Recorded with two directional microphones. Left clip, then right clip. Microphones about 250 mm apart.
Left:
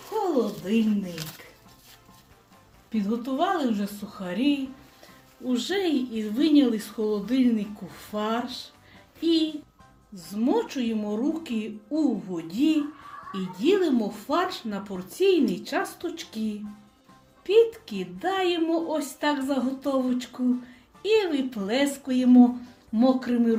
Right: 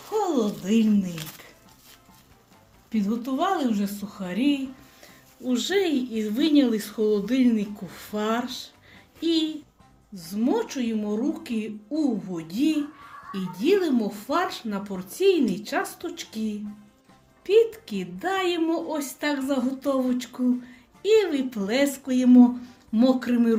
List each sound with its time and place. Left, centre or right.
0.3 s speech: centre
2.9 s speech: centre